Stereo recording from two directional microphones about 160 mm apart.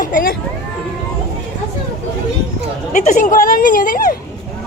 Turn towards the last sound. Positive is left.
turn(degrees=60)  # may be behind; listen again after turning